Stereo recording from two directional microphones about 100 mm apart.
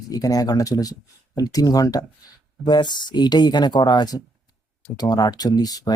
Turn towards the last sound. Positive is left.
turn(degrees=40)  # may be behind; listen again after turning